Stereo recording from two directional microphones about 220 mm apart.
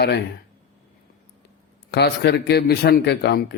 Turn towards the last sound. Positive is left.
turn(degrees=50)  # may be behind; listen again after turning